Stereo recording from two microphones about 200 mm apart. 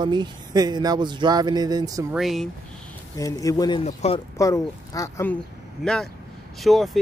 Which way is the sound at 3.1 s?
15° left (ahead or behind).